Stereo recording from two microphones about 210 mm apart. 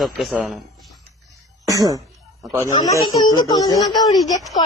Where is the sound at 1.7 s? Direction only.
15° right (ahead or behind).